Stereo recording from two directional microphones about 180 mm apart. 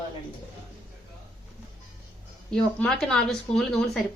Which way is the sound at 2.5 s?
5° left (ahead or behind).